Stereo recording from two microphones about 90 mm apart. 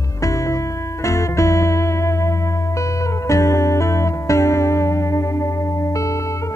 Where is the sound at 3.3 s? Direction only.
35° left (ahead or behind).